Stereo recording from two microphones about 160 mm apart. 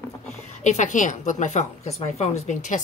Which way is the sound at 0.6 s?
50° left (ahead or behind).